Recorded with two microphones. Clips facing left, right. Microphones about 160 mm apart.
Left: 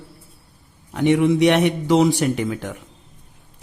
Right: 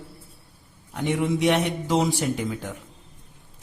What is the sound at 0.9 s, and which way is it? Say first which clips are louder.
Speech: left 8 dB; 75° left (ahead or behind).